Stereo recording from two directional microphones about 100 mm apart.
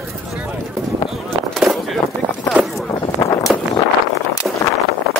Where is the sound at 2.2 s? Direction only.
45° right (ahead or behind).